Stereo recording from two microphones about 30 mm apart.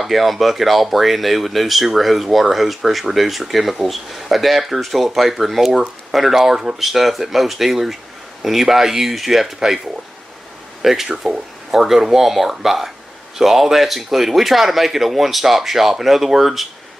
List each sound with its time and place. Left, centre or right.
0.0 s speech: centre
10.8 s speech: centre
11.1 s speech: right
11.7 s speech: centre